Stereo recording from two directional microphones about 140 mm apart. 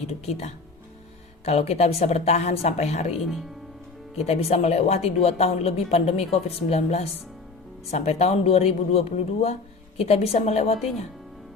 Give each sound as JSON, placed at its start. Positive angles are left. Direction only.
{"t": 0.1, "sound": "a woman's voice", "side_deg": 50}
{"t": 4.2, "sound": "a woman's voice", "side_deg": 50}